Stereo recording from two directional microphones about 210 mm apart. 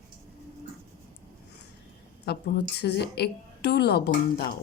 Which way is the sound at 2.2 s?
50° left (ahead or behind).